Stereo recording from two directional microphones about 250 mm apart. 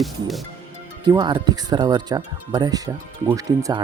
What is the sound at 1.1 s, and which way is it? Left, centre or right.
Speech, centre.